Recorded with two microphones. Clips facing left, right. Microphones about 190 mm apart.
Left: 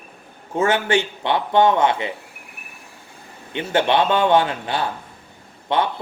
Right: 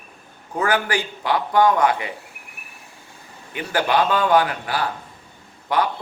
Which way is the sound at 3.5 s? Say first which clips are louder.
Left 2 dB; 25° left (ahead or behind).